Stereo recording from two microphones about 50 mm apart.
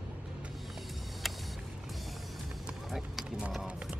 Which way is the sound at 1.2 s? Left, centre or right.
Centre.